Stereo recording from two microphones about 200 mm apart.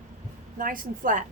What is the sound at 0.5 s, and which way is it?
Speech, 45° right (ahead or behind).